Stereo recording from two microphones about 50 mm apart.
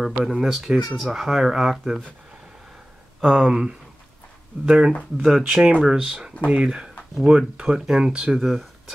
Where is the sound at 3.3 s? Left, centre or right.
Centre.